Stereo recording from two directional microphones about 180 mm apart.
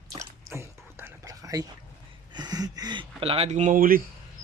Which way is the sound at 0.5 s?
15° right (ahead or behind).